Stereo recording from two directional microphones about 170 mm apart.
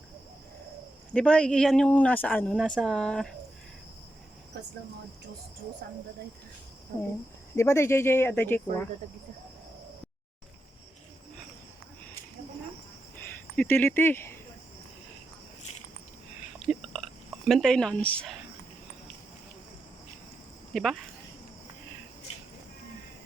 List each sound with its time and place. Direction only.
1.1 s speech: 5° left (ahead or behind)
4.5 s a sound: 85° right
7.5 s speech: 15° left (ahead or behind)
13.1 s speech: 10° left (ahead or behind)
16.6 s a sound: centre (ahead or behind)
20.7 s speech: 5° left (ahead or behind)